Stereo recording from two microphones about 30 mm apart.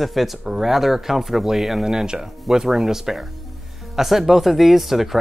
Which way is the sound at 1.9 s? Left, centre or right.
Right.